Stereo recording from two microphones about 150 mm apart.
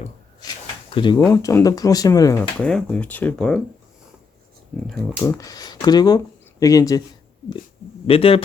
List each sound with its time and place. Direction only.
0.3 s a sound: 30° left (ahead or behind)
1.3 s speech: 20° left (ahead or behind)
2.4 s speech: 5° left (ahead or behind)
4.9 s speech: 20° left (ahead or behind)
8.0 s speech: 40° left (ahead or behind)